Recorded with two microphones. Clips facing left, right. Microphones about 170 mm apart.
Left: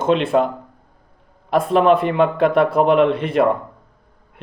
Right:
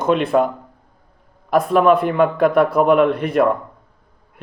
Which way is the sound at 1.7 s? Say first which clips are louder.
Even; 50° right (ahead or behind).